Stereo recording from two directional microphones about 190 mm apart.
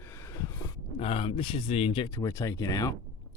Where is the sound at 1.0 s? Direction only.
30° left (ahead or behind).